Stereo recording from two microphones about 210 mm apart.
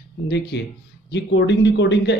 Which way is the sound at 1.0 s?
55° left (ahead or behind).